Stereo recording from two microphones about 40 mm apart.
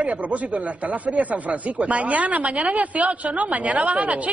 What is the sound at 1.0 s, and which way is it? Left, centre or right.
Speech, right.